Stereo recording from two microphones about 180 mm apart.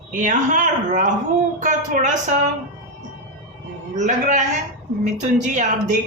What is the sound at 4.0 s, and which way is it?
Speech, 45° right (ahead or behind).